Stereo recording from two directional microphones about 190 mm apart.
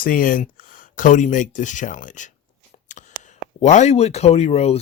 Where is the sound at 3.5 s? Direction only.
40° left (ahead or behind).